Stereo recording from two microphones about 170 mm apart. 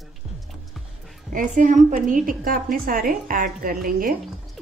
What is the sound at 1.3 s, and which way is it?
A woman's voice, 50° right (ahead or behind).